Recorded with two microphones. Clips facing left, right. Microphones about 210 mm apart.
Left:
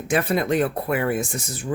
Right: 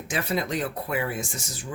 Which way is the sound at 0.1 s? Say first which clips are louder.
Left 7 dB; 55° left (ahead or behind).